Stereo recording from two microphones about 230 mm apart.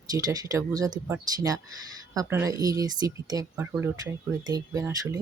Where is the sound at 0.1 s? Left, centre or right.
Centre.